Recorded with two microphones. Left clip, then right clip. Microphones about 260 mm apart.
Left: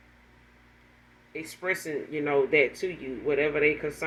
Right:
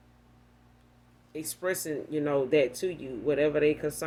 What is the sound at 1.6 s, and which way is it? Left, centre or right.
Speech, right.